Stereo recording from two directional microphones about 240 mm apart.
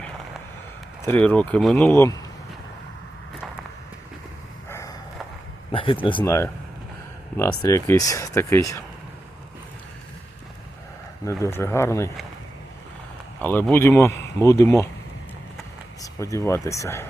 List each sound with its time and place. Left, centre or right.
1.0 s speech: centre
4.7 s a sound: centre
5.7 s speech: left
11.3 s speech: centre
13.4 s speech: centre
16.0 s speech: centre